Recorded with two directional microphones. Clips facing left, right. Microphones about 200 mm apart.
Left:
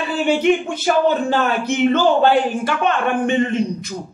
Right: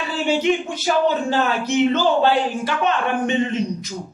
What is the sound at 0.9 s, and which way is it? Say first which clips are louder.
A man's voice: left 2 dB; 55° left (ahead or behind).